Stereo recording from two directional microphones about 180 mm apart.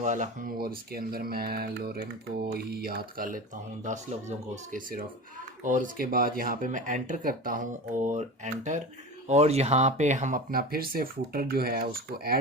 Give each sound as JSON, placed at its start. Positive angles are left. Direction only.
{"t": 0.0, "sound": "speech", "side_deg": -45}
{"t": 9.2, "sound": "speech", "side_deg": -35}